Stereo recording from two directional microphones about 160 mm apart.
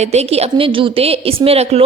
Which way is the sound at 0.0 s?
40° right (ahead or behind).